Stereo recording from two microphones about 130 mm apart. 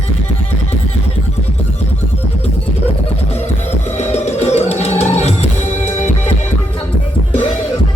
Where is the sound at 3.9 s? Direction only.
60° left (ahead or behind).